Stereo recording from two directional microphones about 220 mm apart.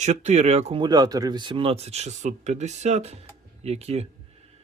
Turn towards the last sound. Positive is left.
turn(degrees=-30)  # may be behind; listen again after turning